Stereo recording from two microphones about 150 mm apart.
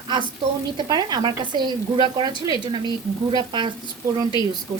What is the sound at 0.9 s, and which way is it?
A woman's voice, 30° right (ahead or behind).